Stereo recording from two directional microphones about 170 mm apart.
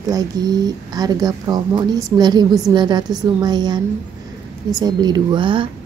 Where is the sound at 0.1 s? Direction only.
20° right (ahead or behind).